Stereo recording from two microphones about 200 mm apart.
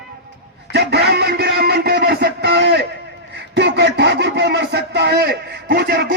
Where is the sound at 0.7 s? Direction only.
55° right (ahead or behind).